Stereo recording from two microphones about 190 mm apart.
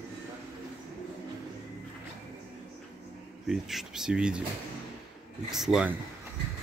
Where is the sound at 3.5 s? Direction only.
Centre (ahead or behind).